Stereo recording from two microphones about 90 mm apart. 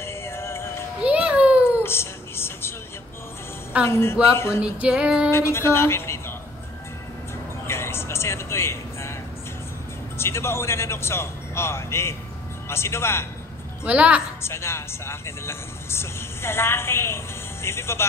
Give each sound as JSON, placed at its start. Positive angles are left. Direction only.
{"t": 0.0, "sound": "music", "side_deg": 30}
{"t": 1.0, "sound": "a sound", "side_deg": -15}
{"t": 1.8, "sound": "music", "side_deg": 25}
{"t": 3.8, "sound": "speech", "side_deg": 30}
{"t": 4.6, "sound": "music", "side_deg": -10}
{"t": 5.3, "sound": "speech", "side_deg": 30}
{"t": 7.6, "sound": "music", "side_deg": 30}
{"t": 10.1, "sound": "speech", "side_deg": 30}
{"t": 13.8, "sound": "music", "side_deg": -15}
{"t": 14.4, "sound": "speech", "side_deg": 30}